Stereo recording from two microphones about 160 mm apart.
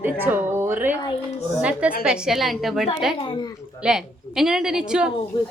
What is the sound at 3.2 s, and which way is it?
Speech, 30° left (ahead or behind).